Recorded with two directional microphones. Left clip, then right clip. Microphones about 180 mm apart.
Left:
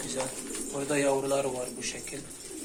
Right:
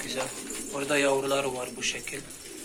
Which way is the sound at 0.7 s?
Centre (ahead or behind).